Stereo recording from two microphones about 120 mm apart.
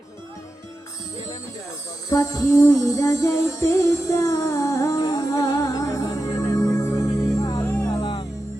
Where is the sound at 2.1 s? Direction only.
25° left (ahead or behind).